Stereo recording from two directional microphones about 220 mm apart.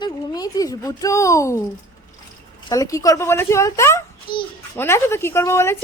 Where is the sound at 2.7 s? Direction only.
15° left (ahead or behind).